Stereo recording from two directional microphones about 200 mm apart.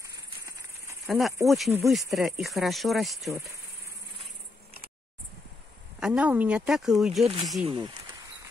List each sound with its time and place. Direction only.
0.0 s a sound: 15° right (ahead or behind)
1.0 s speech: centre (ahead or behind)
5.9 s speech: 5° right (ahead or behind)
7.6 s speech: 25° right (ahead or behind)